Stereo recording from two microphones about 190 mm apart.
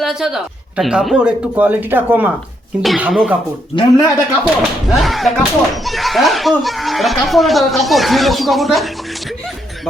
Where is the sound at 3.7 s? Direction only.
25° left (ahead or behind).